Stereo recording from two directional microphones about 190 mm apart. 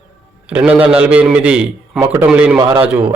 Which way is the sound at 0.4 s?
5° right (ahead or behind).